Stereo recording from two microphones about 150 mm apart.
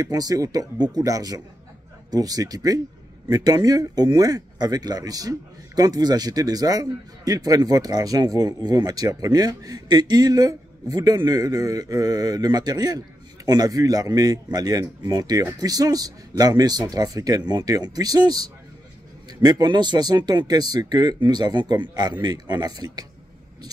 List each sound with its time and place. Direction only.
0.0 s speech: 25° right (ahead or behind)